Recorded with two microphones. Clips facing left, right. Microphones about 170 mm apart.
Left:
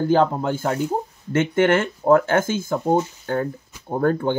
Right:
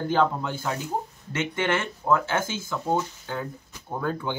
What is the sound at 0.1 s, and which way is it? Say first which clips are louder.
Speech: left 4 dB; 45° left (ahead or behind).